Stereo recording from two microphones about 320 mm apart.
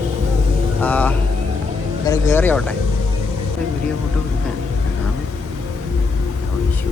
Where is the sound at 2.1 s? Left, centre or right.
Centre.